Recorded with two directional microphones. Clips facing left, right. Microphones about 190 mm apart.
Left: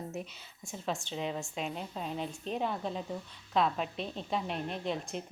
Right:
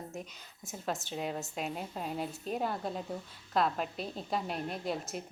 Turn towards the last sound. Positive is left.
turn(degrees=-5)  # may be behind; listen again after turning